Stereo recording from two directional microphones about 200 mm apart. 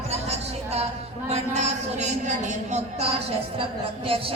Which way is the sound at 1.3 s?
35° right (ahead or behind).